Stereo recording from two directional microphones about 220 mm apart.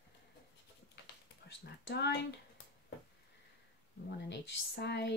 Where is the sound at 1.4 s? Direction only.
50° left (ahead or behind).